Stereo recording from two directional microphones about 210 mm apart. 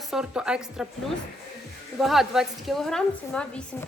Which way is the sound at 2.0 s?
Centre (ahead or behind).